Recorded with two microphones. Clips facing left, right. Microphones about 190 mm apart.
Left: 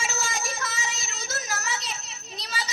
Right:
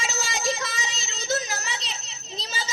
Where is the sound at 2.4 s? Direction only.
25° right (ahead or behind).